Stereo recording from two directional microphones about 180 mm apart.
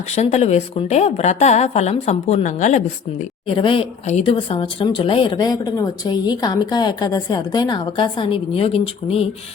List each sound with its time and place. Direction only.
0.2 s a woman's voice: 40° left (ahead or behind)
3.5 s speech: 30° left (ahead or behind)